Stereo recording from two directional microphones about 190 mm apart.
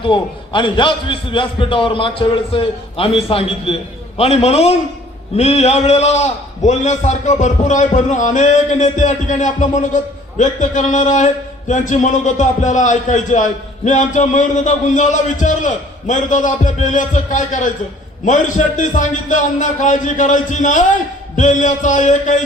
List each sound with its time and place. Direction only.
0.0 s a man's voice: 25° left (ahead or behind)